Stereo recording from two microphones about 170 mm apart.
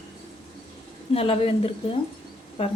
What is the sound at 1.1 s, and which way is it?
A woman's voice, 35° left (ahead or behind).